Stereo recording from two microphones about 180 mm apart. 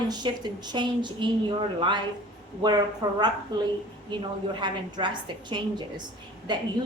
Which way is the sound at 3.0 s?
25° right (ahead or behind).